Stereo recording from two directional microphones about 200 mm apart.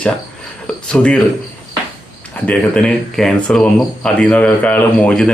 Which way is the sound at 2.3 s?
5° left (ahead or behind).